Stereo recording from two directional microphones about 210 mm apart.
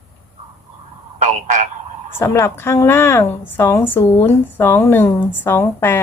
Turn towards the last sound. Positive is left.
turn(degrees=10)  # may be behind; listen again after turning